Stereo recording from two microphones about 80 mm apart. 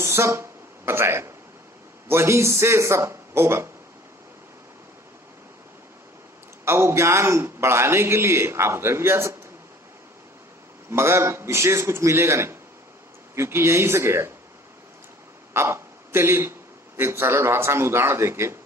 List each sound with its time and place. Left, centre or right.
0.0 s a man's voice: right
6.7 s a man's voice: right
10.8 s a man's voice: right
15.5 s a man's voice: right